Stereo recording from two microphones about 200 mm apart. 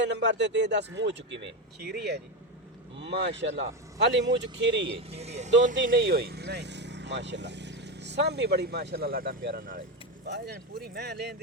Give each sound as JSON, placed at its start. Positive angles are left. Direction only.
{"t": 0.0, "sound": "a man's voice", "side_deg": -60}
{"t": 4.9, "sound": "speech", "side_deg": -30}
{"t": 5.7, "sound": "a man's voice", "side_deg": -60}